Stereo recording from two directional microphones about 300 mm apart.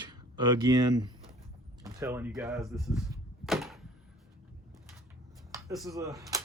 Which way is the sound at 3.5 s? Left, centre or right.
Centre.